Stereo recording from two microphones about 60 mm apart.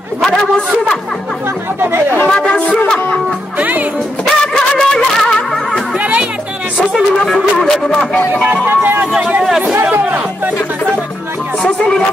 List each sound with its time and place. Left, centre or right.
1.8 s speech: right
2.2 s music: centre
3.5 s music: right
4.3 s a sound: centre
5.9 s music: right
7.2 s a sound: centre
8.6 s speech: right
9.0 s a sound: centre
11.6 s music: centre